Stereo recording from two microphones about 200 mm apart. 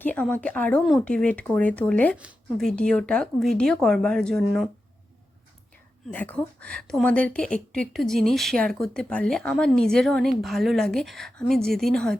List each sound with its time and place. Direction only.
0.0 s a woman's voice: 10° left (ahead or behind)
6.1 s a woman's voice: 5° left (ahead or behind)